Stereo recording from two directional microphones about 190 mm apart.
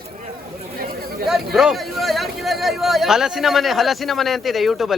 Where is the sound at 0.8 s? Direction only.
50° right (ahead or behind).